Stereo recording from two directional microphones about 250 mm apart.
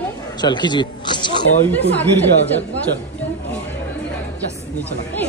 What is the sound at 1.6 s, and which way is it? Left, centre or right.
Speech, centre.